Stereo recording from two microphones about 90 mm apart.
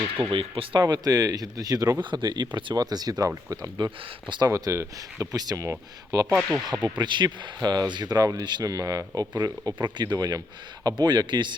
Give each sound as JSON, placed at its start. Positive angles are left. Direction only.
{"t": 0.3, "sound": "speech", "side_deg": -85}
{"t": 0.8, "sound": "speech", "side_deg": -50}
{"t": 2.0, "sound": "a man's voice", "side_deg": -60}
{"t": 4.5, "sound": "speech", "side_deg": -35}
{"t": 6.3, "sound": "speech", "side_deg": 0}
{"t": 7.0, "sound": "speech", "side_deg": -55}
{"t": 8.6, "sound": "a man's voice", "side_deg": -40}